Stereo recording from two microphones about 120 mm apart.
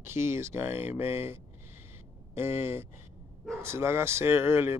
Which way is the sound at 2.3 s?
20° right (ahead or behind).